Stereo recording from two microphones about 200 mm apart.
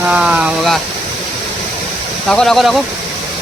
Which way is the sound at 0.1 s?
5° right (ahead or behind).